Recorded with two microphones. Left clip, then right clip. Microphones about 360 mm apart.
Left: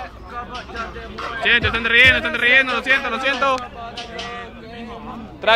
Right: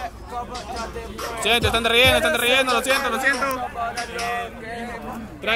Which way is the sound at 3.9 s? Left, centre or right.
Centre.